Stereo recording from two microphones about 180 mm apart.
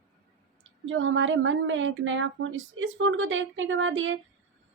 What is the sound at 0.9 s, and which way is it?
A woman's voice, 90° right.